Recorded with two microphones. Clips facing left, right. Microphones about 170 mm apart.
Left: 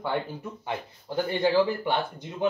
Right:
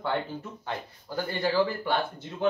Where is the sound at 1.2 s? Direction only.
20° left (ahead or behind).